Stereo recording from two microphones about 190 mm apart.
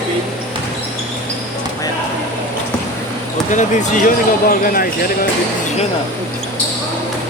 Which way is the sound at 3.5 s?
40° left (ahead or behind).